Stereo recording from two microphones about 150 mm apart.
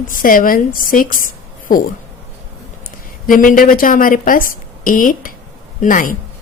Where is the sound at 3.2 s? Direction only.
65° left (ahead or behind).